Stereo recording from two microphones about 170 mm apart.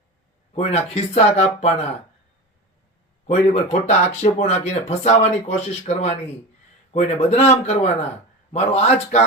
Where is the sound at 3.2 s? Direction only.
40° left (ahead or behind).